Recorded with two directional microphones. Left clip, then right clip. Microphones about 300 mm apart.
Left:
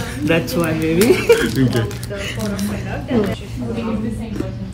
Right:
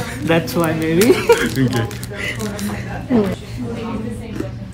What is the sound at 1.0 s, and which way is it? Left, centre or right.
Speech, centre.